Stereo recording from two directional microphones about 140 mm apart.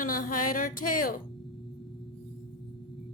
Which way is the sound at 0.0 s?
80° left.